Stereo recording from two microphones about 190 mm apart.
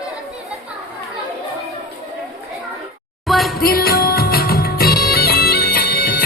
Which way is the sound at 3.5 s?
55° left (ahead or behind).